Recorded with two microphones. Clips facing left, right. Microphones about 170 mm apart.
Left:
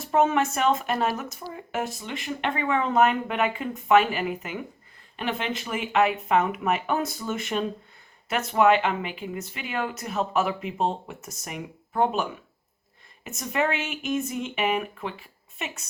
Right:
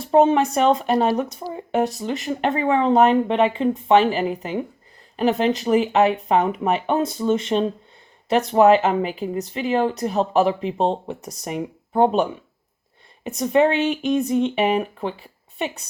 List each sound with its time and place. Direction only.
0.0 s speech: 30° right (ahead or behind)